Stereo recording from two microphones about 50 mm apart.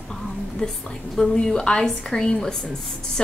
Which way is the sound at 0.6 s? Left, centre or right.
Left.